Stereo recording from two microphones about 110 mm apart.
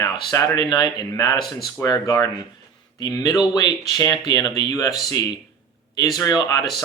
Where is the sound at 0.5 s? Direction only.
35° left (ahead or behind).